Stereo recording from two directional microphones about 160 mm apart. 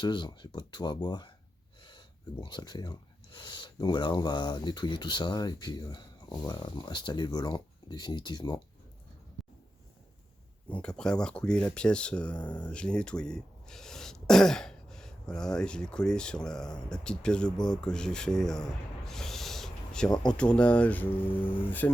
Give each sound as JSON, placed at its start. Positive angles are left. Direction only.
{"t": 0.0, "sound": "speech", "side_deg": 30}
{"t": 9.4, "sound": "a sound", "side_deg": 0}
{"t": 10.7, "sound": "speech", "side_deg": 5}